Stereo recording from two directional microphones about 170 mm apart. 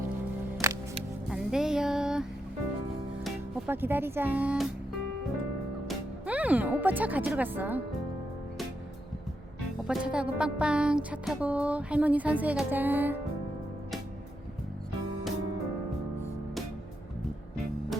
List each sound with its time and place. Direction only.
0.6 s music: 15° right (ahead or behind)
1.3 s music: 5° right (ahead or behind)
3.7 s music: 10° right (ahead or behind)
5.9 s speech: 10° right (ahead or behind)
9.8 s music: 5° right (ahead or behind)